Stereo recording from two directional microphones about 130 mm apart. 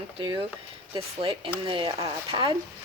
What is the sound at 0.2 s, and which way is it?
Speech, 35° right (ahead or behind).